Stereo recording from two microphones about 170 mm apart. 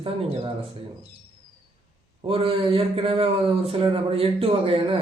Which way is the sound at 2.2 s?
35° right (ahead or behind).